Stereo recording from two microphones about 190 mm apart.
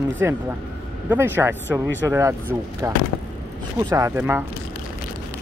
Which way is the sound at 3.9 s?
15° right (ahead or behind).